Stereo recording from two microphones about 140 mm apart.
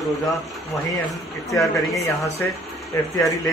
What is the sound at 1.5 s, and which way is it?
Speech, centre (ahead or behind).